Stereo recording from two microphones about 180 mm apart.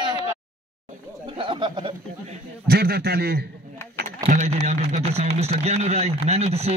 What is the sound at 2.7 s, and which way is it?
Speech, 60° right (ahead or behind).